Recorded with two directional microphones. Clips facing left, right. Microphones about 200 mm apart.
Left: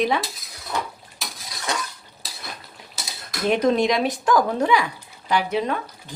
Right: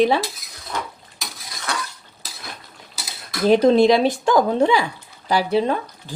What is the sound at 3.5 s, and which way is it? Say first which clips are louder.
Speech: right 6 dB; 30° right (ahead or behind).